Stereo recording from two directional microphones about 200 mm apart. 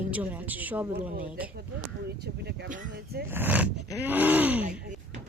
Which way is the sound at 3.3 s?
10° right (ahead or behind).